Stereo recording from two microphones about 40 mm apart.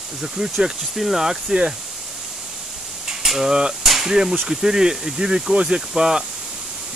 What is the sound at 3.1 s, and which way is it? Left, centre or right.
Mechanisms, centre.